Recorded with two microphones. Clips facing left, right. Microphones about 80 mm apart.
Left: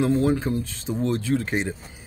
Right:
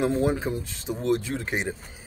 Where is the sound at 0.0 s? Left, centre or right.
Centre.